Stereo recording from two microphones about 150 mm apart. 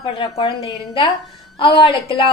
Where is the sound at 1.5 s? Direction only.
35° left (ahead or behind).